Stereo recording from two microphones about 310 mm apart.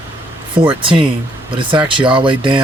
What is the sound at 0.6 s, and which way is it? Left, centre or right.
Speech, centre.